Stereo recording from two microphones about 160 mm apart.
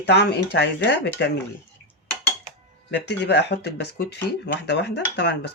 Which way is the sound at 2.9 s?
90° left.